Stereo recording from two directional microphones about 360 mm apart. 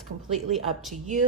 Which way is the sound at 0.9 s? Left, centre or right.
Centre.